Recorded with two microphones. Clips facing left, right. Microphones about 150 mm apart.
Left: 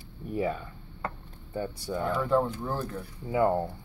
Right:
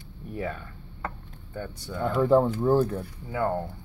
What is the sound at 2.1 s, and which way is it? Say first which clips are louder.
Speech: right 7 dB; 25° right (ahead or behind).